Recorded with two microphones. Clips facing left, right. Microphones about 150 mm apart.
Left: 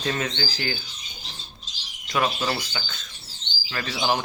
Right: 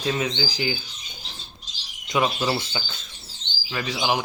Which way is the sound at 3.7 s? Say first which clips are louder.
Right 1 dB; 10° right (ahead or behind).